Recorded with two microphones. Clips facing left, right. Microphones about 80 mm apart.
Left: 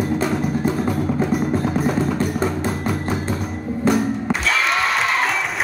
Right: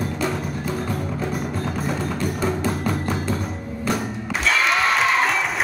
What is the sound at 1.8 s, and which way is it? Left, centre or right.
Music, centre.